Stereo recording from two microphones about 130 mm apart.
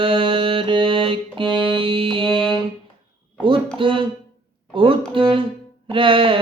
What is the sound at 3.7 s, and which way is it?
Music, 40° right (ahead or behind).